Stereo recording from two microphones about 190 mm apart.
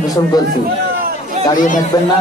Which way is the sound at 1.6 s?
45° left (ahead or behind).